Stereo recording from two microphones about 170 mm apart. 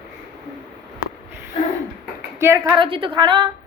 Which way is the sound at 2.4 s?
15° right (ahead or behind).